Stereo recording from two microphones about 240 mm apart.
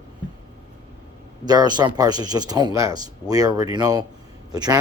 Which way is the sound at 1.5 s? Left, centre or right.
Centre.